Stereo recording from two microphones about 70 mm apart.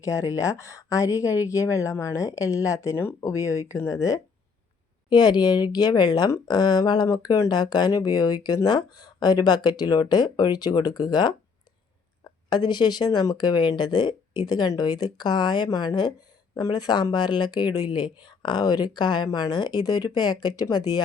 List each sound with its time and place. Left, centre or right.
0.0 s speech: left
2.9 s speech: left
3.2 s speech: left
5.0 s a woman's voice: left
7.1 s speech: left
14.8 s speech: left
16.6 s speech: left